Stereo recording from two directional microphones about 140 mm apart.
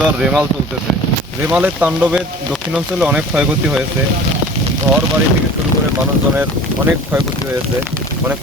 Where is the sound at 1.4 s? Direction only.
10° right (ahead or behind).